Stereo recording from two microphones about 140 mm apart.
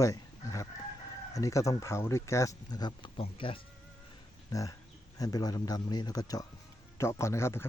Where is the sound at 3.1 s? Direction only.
40° left (ahead or behind).